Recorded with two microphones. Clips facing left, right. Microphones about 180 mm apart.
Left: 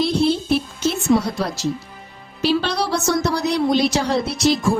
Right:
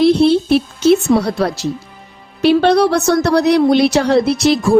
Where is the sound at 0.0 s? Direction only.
65° right (ahead or behind).